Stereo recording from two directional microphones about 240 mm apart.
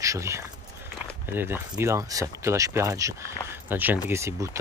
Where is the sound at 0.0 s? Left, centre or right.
Centre.